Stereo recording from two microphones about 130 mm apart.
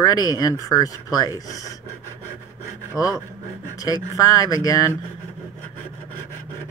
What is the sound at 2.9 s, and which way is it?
Speech, 25° left (ahead or behind).